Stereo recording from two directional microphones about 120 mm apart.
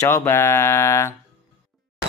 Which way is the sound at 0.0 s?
20° left (ahead or behind).